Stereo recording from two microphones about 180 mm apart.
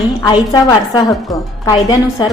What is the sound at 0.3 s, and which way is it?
A woman's voice, 20° left (ahead or behind).